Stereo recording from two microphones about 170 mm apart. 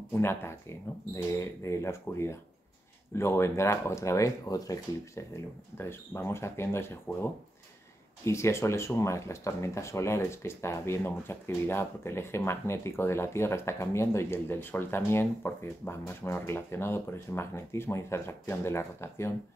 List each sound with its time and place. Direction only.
0.1 s speech: 15° left (ahead or behind)
8.3 s speech: 15° left (ahead or behind)